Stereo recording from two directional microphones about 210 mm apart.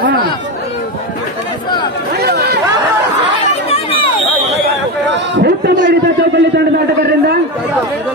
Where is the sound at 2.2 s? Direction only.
50° right (ahead or behind).